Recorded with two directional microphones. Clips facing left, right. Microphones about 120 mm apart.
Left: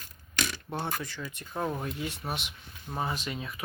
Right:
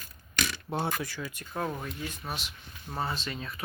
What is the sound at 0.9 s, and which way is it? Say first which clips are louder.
Speech: right 1 dB; 5° right (ahead or behind).